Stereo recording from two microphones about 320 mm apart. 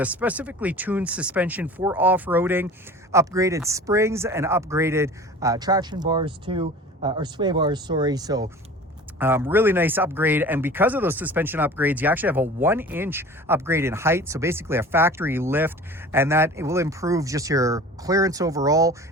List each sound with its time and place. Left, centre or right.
0.0 s speech: centre